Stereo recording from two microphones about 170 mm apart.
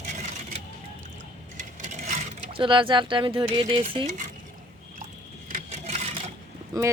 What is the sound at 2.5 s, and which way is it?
Speech, 30° right (ahead or behind).